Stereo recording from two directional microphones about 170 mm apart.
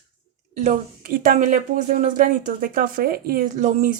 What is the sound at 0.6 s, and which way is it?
Speech, 55° right (ahead or behind).